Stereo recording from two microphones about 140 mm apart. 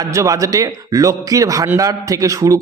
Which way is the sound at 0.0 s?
25° right (ahead or behind).